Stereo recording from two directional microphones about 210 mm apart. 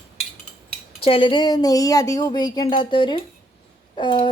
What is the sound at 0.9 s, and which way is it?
Speech, 25° left (ahead or behind).